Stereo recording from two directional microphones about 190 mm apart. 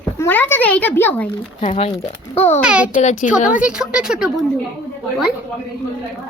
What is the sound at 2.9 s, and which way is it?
Speech, 40° left (ahead or behind).